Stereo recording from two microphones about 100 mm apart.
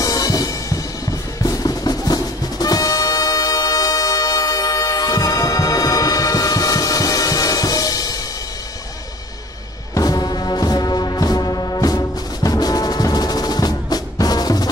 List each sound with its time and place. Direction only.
0.0 s drum: 40° left (ahead or behind)
9.9 s music: 40° left (ahead or behind)